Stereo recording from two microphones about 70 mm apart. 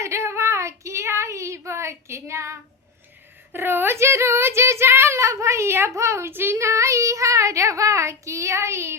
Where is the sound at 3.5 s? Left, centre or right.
Right.